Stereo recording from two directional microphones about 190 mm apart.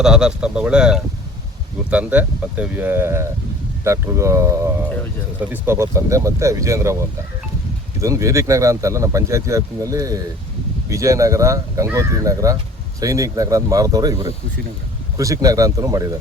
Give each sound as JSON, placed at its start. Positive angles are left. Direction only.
{"t": 0.0, "sound": "speech", "side_deg": -5}
{"t": 8.0, "sound": "speech", "side_deg": -15}